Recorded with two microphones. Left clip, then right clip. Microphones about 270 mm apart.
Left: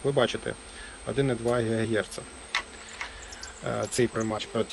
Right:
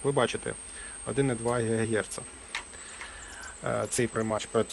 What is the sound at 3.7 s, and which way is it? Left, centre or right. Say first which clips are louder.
Speech: left 2 dB; centre.